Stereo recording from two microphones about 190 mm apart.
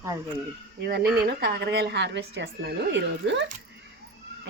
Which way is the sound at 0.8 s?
60° right (ahead or behind).